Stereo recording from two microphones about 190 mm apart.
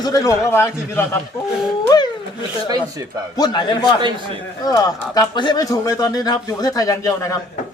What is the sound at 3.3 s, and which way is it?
Speech, 20° left (ahead or behind).